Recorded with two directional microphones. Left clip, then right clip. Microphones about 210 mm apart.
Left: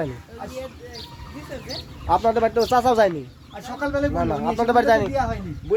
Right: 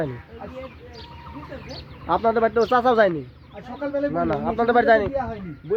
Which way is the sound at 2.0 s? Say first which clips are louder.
Left 1 dB; 35° right (ahead or behind).